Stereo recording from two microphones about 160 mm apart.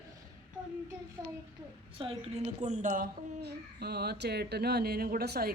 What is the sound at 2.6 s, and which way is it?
Speech, 55° right (ahead or behind).